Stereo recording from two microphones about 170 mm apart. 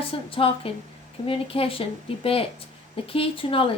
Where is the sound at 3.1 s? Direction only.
30° left (ahead or behind).